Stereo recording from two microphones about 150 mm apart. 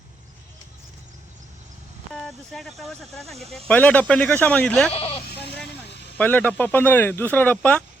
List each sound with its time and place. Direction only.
2.1 s speech: centre (ahead or behind)
4.9 s speech: 40° left (ahead or behind)
6.1 s speech: 10° left (ahead or behind)